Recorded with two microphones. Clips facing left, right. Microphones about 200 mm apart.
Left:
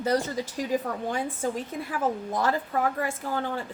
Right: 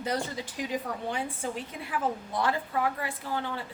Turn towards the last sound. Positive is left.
turn(degrees=45)  # may be behind; listen again after turning